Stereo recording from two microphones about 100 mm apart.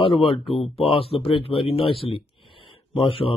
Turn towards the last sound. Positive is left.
turn(degrees=65)  # may be behind; listen again after turning